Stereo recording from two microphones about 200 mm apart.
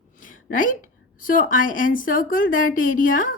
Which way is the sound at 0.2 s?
40° left (ahead or behind).